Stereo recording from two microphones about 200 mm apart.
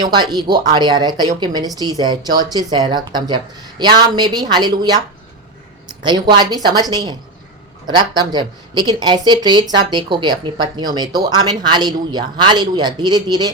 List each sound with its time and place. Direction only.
0.1 s speech: 20° right (ahead or behind)